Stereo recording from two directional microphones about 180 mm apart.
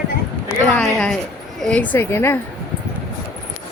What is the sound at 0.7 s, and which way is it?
A woman's voice, 5° left (ahead or behind).